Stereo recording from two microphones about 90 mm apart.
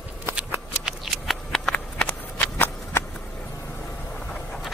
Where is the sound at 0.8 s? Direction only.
Centre (ahead or behind).